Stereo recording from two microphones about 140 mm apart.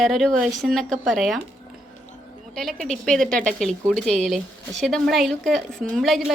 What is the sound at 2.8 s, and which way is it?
A woman's voice, 5° left (ahead or behind).